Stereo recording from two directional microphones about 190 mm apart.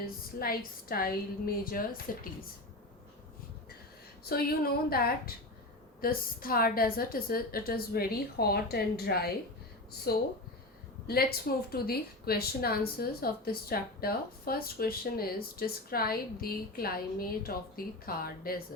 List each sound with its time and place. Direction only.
0.0 s a woman's voice: 50° left (ahead or behind)
4.3 s a woman's voice: 55° left (ahead or behind)